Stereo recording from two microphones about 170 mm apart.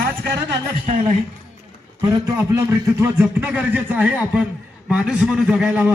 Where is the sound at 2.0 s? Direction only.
20° right (ahead or behind).